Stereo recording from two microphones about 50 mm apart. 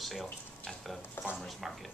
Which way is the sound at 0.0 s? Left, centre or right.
Centre.